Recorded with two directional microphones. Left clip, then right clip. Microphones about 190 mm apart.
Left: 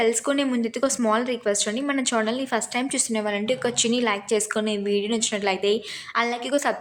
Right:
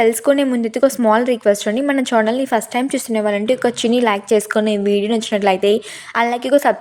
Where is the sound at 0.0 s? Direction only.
35° right (ahead or behind).